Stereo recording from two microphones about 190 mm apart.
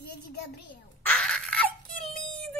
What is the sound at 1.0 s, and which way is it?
Wail, 5° left (ahead or behind).